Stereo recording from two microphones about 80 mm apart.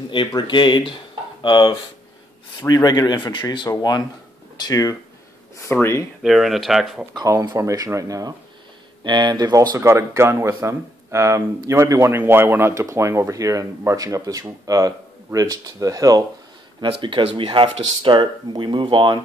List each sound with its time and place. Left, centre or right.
0.4 s speech: left
2.7 s speech: left
4.6 s speech: left
5.6 s speech: left
6.2 s speech: centre
7.7 s speech: right
9.0 s speech: right
9.8 s speech: right
16.8 s speech: right